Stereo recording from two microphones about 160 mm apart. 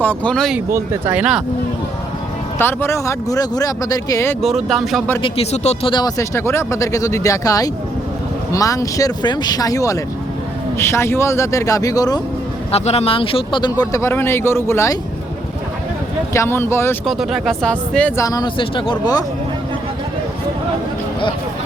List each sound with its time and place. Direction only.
0.0 s speech: 10° left (ahead or behind)
0.7 s speech: 10° right (ahead or behind)
2.6 s speech: 15° left (ahead or behind)
4.4 s speech: centre (ahead or behind)
5.2 s speech: 40° left (ahead or behind)
5.9 s speech: 25° left (ahead or behind)
12.7 s speech: 40° left (ahead or behind); by 14.9 s 15° left (ahead or behind)
16.3 s speech: 15° left (ahead or behind)
17.1 s speech: centre (ahead or behind)
18.2 s speech: 25° left (ahead or behind)